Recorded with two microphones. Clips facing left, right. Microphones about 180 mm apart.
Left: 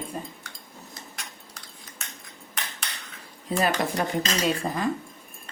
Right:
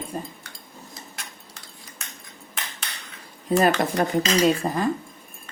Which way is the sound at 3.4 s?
45° right (ahead or behind).